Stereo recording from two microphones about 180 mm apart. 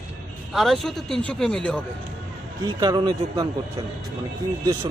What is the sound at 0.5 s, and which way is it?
Speech, centre (ahead or behind).